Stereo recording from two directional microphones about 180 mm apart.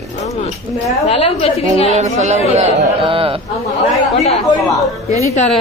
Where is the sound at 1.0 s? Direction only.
35° left (ahead or behind).